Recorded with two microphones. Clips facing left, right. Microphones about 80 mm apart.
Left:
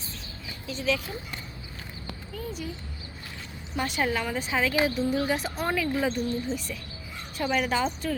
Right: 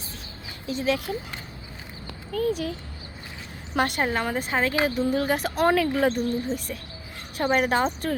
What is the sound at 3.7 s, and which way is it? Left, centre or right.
Speech, right.